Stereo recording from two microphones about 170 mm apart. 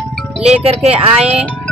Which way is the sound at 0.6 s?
35° right (ahead or behind).